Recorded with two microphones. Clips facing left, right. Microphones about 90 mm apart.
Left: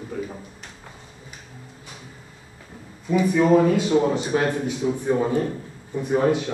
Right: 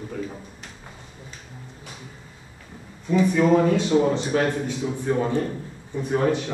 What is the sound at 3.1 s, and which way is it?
Speech, 5° left (ahead or behind).